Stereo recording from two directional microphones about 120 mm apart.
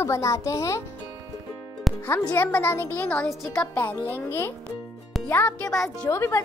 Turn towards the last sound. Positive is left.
turn(degrees=20)  # may be behind; listen again after turning